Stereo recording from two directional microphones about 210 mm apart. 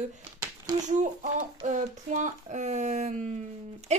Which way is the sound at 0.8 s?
35° right (ahead or behind).